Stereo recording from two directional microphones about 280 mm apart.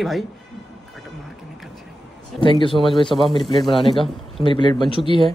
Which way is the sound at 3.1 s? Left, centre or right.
Centre.